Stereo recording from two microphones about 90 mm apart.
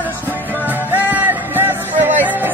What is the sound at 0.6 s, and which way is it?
Music, 20° right (ahead or behind).